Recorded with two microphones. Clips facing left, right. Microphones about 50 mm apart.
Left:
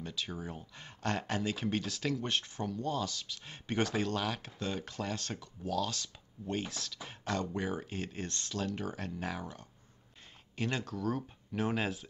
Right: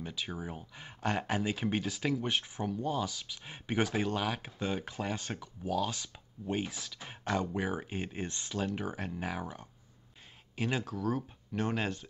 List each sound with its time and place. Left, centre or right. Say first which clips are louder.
0.0 s speech: right 1 dB; centre